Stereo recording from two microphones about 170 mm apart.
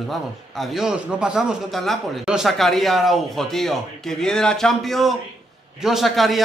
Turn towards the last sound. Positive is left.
turn(degrees=0)  # may be behind; listen again after turning